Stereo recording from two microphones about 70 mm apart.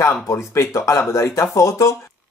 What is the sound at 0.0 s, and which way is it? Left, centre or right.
Speech, left.